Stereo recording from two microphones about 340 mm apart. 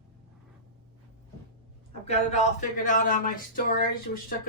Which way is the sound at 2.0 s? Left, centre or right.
Centre.